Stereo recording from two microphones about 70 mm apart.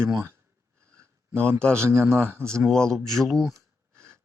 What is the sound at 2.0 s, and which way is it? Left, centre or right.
Speech, right.